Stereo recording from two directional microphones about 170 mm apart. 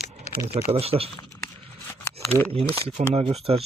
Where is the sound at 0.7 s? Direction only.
35° right (ahead or behind).